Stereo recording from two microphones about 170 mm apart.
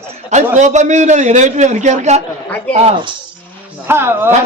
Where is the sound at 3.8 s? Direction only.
15° right (ahead or behind).